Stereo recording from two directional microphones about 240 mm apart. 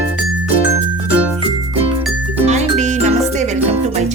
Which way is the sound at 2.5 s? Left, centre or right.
Right.